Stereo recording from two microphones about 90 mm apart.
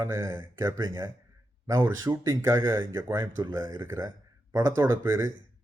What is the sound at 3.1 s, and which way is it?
Speech, 50° right (ahead or behind).